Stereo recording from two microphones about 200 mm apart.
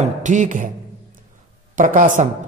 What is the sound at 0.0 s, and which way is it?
Speech, 40° right (ahead or behind).